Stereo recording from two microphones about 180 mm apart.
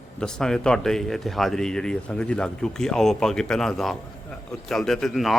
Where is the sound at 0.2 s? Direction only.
5° left (ahead or behind).